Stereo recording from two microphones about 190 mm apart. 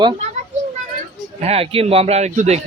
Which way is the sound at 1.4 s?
30° right (ahead or behind).